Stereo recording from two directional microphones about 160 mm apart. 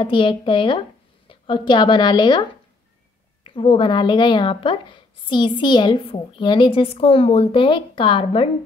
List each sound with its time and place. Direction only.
0.0 s a woman's voice: 30° left (ahead or behind)
3.4 s speech: 35° left (ahead or behind)